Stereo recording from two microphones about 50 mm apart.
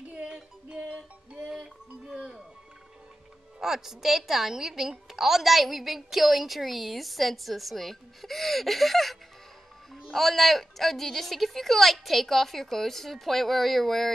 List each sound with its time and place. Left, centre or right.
0.1 s music: centre
1.5 s music: centre
3.6 s a woman's voice: centre